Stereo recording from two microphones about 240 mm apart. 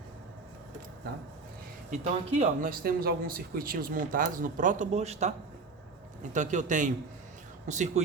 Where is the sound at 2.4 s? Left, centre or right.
Right.